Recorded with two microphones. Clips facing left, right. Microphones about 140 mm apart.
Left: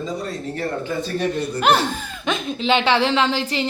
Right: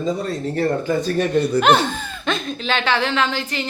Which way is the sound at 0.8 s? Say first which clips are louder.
Right 4 dB; 45° right (ahead or behind).